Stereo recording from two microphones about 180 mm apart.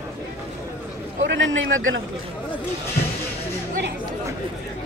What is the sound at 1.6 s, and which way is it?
Speech, 90° right.